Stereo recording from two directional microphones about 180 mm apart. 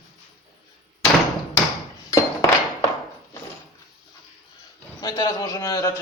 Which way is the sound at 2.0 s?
20° left (ahead or behind).